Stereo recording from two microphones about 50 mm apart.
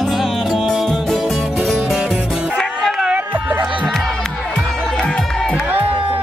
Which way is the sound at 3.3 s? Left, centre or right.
Right.